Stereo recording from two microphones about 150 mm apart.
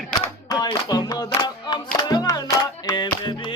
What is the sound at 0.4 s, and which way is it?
Music, 25° left (ahead or behind).